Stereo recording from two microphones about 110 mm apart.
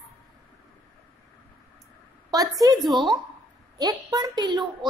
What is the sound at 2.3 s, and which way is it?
Speech, 35° right (ahead or behind).